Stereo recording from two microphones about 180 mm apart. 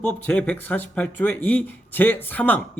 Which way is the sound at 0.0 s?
10° left (ahead or behind).